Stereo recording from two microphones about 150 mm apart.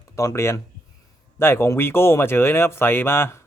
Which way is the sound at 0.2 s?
20° left (ahead or behind).